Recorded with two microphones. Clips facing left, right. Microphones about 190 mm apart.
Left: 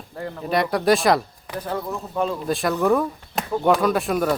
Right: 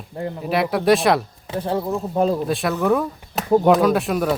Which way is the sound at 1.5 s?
30° right (ahead or behind).